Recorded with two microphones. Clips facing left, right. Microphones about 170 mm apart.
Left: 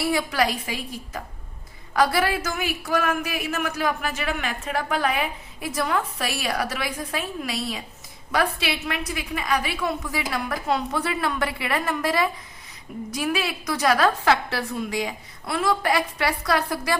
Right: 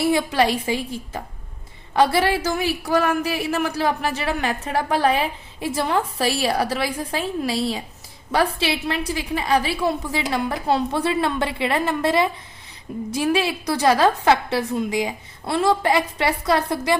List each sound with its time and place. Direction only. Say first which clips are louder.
0.0 s a woman's voice: right 4 dB; 25° right (ahead or behind)